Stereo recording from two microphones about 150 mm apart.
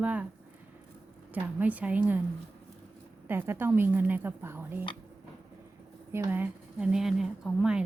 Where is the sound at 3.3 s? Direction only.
15° right (ahead or behind).